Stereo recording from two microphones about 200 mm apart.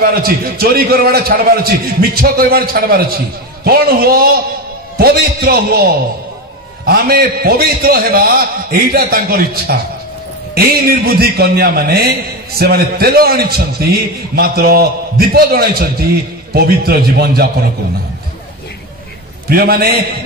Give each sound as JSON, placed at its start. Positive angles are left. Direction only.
{"t": 0.0, "sound": "a man's voice", "side_deg": -50}
{"t": 6.9, "sound": "a man's voice", "side_deg": -50}
{"t": 19.5, "sound": "a man's voice", "side_deg": -50}